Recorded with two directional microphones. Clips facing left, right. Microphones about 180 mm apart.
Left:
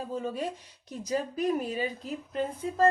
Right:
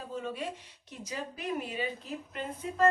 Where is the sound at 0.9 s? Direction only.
40° left (ahead or behind).